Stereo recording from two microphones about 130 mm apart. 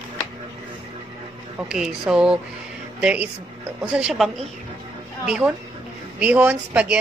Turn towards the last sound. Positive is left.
turn(degrees=-10)  # may be behind; listen again after turning